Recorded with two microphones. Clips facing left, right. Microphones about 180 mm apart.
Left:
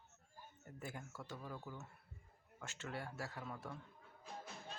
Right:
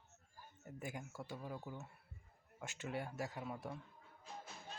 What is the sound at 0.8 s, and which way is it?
Speech, 15° right (ahead or behind).